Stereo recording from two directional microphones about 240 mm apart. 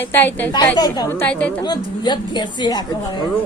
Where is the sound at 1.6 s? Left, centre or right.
Centre.